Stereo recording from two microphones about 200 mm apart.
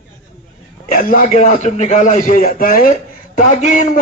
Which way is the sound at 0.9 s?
45° left (ahead or behind).